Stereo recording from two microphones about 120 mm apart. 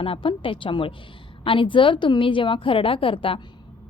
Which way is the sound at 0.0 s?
50° left (ahead or behind).